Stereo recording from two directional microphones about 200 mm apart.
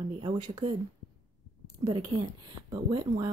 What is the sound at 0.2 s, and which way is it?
Speech, 20° right (ahead or behind).